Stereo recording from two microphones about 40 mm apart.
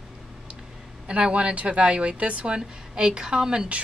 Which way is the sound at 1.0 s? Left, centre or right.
Right.